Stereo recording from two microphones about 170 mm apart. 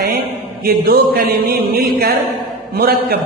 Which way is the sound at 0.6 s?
60° right (ahead or behind).